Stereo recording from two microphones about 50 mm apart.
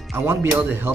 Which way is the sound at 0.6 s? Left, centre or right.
Right.